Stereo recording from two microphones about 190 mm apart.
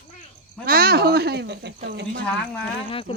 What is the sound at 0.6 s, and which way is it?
Speech, 50° right (ahead or behind).